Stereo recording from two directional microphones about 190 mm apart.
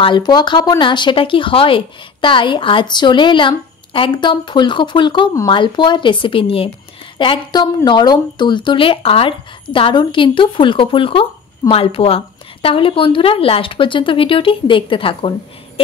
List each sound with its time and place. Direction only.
0.0 s speech: 25° left (ahead or behind)